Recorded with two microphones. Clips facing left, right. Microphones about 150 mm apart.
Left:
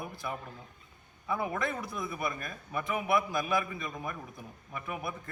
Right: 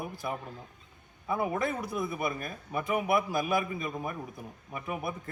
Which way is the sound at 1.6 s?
5° right (ahead or behind).